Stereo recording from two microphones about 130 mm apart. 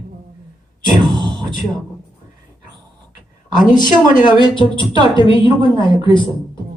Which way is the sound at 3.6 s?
90° left.